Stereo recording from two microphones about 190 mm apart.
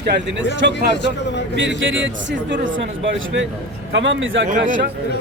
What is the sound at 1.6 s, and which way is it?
A man's voice, 75° right (ahead or behind).